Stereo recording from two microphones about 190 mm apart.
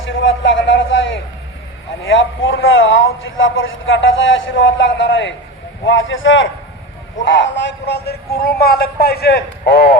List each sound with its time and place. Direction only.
0.0 s a sound: 85° left
2.0 s a man's voice: 90° left
5.8 s a man's voice: 90° left
7.2 s speech: 70° left (ahead or behind)